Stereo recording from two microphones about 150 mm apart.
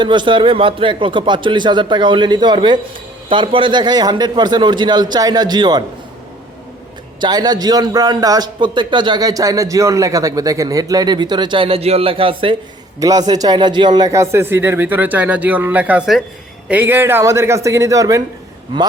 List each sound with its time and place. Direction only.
0.0 s a man's voice: 30° right (ahead or behind)
7.2 s a man's voice: 25° right (ahead or behind)
13.0 s a man's voice: 25° right (ahead or behind)